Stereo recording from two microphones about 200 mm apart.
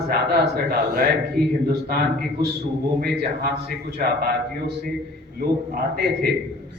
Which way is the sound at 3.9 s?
50° right (ahead or behind).